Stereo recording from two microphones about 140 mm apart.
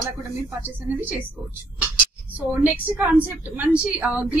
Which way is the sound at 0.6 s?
15° right (ahead or behind).